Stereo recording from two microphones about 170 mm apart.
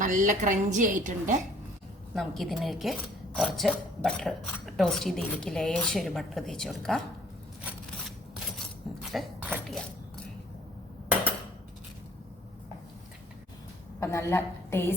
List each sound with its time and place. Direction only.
0.0 s a woman's voice: 50° right (ahead or behind)
2.1 s speech: centre (ahead or behind)
9.1 s a sound: 5° right (ahead or behind)
14.0 s a woman's voice: 15° left (ahead or behind)